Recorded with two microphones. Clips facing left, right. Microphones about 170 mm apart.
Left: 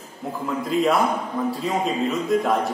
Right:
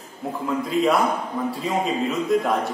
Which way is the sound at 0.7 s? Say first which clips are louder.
Left 1 dB; centre (ahead or behind).